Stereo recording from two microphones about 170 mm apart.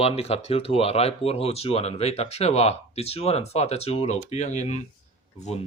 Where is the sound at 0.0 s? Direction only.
35° left (ahead or behind).